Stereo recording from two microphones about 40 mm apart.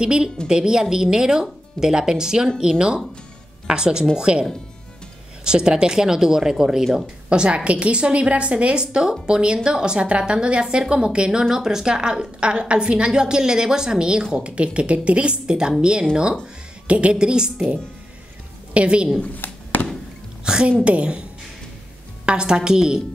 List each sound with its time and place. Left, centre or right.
0.0 s a woman's voice: right
6.8 s speech: centre
7.2 s a woman's voice: right
18.7 s a woman's voice: right
19.3 s a sound: left
20.4 s a woman's voice: centre